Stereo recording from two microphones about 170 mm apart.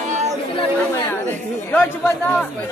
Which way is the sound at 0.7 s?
15° left (ahead or behind).